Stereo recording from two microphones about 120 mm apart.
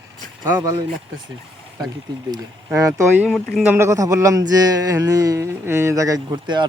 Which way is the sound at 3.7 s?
25° right (ahead or behind).